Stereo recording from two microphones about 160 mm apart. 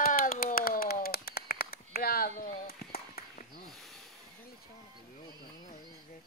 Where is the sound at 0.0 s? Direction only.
60° left (ahead or behind); by 3.6 s 75° left (ahead or behind).